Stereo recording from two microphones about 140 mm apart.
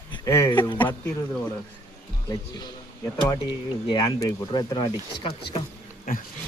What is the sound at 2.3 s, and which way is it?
Speech, 30° left (ahead or behind).